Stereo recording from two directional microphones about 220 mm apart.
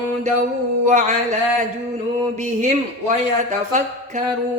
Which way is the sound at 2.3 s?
30° right (ahead or behind).